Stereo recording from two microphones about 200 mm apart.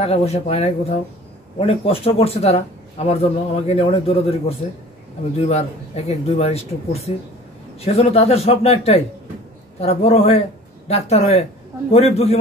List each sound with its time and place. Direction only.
0.0 s a man's voice: 30° left (ahead or behind)